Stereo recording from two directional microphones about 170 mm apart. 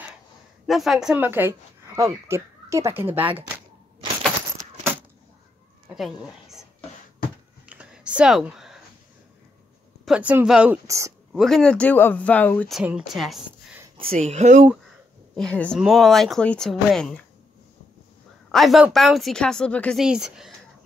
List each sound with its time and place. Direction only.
0.7 s speech: centre (ahead or behind)
5.9 s a woman's voice: centre (ahead or behind)
7.6 s a sound: 5° right (ahead or behind)
10.0 s speech: 5° right (ahead or behind)
10.9 s speech: 20° right (ahead or behind)
11.3 s speech: centre (ahead or behind)
12.7 s speech: 5° right (ahead or behind)
13.9 s speech: 35° right (ahead or behind)
14.7 s a sound: centre (ahead or behind)
15.8 s speech: centre (ahead or behind)
18.5 s speech: centre (ahead or behind)